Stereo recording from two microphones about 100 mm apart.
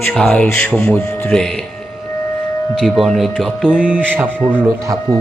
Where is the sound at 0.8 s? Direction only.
20° left (ahead or behind).